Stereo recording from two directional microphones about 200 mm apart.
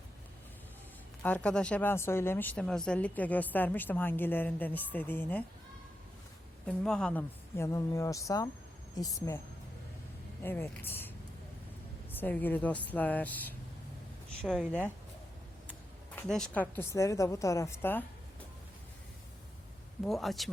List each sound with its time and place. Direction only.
1.2 s a woman's voice: 5° left (ahead or behind)
6.7 s a woman's voice: 5° left (ahead or behind)
10.4 s a woman's voice: 10° left (ahead or behind)
12.1 s a woman's voice: 10° left (ahead or behind)
16.1 s a woman's voice: 5° left (ahead or behind)
20.1 s speech: centre (ahead or behind)